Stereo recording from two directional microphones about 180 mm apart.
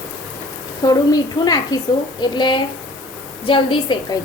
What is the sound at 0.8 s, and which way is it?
A woman's voice, 20° left (ahead or behind).